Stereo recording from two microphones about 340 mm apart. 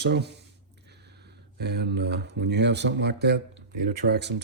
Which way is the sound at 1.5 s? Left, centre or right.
Right.